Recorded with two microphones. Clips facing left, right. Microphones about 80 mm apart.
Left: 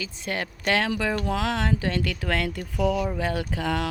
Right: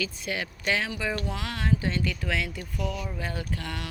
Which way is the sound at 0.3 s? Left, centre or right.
Left.